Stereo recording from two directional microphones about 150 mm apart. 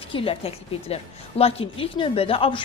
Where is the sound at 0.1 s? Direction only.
40° left (ahead or behind).